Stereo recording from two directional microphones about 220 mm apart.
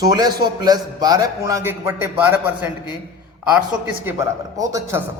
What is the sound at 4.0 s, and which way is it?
A man's voice, 15° right (ahead or behind).